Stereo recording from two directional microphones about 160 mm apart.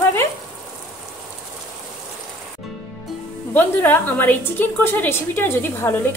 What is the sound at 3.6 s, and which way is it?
A woman's voice, 10° left (ahead or behind).